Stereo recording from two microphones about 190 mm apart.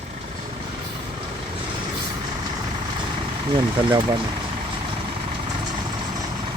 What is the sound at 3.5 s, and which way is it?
Speech, 25° right (ahead or behind).